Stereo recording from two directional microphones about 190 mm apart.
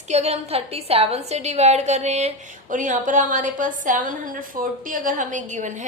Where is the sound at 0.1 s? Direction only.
35° right (ahead or behind).